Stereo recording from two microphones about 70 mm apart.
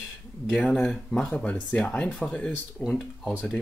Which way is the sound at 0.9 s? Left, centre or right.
Centre.